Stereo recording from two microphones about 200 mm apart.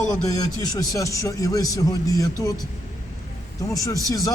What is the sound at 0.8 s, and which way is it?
A man's voice, 15° left (ahead or behind).